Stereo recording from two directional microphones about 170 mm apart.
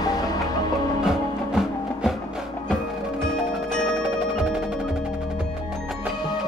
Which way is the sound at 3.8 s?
5° left (ahead or behind).